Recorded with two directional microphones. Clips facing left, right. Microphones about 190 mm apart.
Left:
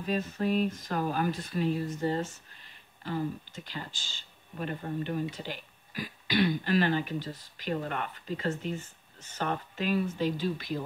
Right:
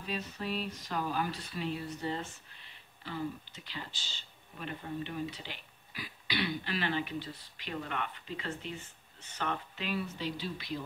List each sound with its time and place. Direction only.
0.0 s speech: 50° left (ahead or behind)